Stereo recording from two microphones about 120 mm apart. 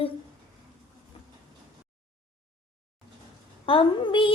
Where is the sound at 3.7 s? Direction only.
45° left (ahead or behind).